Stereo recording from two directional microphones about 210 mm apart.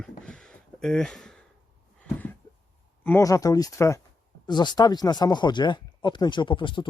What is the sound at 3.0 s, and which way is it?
Speech, 10° left (ahead or behind).